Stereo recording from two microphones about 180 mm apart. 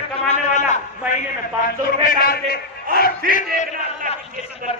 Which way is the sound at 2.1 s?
55° left (ahead or behind).